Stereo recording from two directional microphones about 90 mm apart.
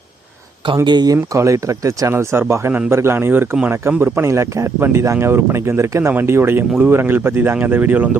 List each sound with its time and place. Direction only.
0.9 s speech: 55° right (ahead or behind)
1.1 s a man's voice: 35° right (ahead or behind); by 8.2 s 20° right (ahead or behind)